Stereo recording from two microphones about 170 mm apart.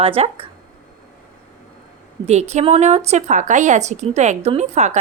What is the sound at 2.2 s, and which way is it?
A woman's voice, 40° right (ahead or behind).